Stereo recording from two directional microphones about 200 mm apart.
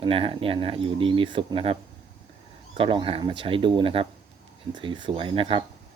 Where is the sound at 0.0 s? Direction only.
30° right (ahead or behind).